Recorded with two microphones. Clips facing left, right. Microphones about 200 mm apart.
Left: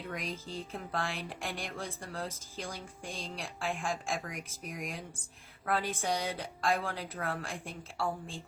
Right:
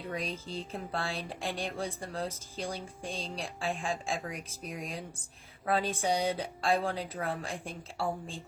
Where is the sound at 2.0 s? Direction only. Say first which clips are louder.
Right 3 dB; 15° right (ahead or behind).